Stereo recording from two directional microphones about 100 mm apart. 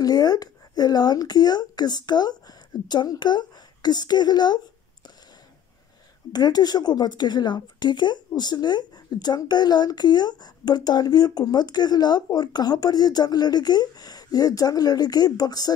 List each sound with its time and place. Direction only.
0.0 s speech: 40° left (ahead or behind)
6.3 s speech: 40° left (ahead or behind)